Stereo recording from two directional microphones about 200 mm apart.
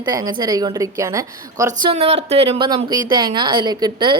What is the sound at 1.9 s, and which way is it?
Speech, 30° right (ahead or behind).